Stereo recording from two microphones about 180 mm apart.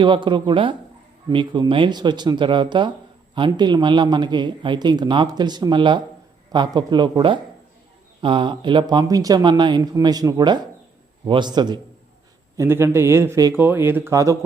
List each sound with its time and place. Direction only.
0.0 s speech: 25° right (ahead or behind)